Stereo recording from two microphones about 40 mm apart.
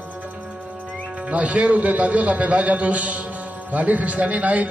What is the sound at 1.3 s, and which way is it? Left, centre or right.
A man's voice, right.